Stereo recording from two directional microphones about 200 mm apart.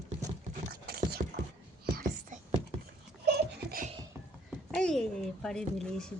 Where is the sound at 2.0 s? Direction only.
40° right (ahead or behind).